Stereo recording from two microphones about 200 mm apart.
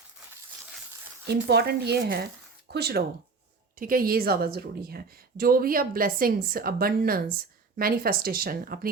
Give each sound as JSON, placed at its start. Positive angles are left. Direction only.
{"t": 1.3, "sound": "a woman's voice", "side_deg": -55}